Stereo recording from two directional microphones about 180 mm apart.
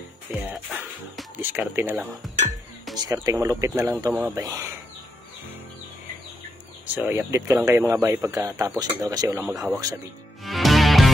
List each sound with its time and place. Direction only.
0.3 s music: 10° right (ahead or behind)
3.0 s speech: 20° right (ahead or behind)
6.9 s speech: 10° right (ahead or behind)
10.4 s music: centre (ahead or behind)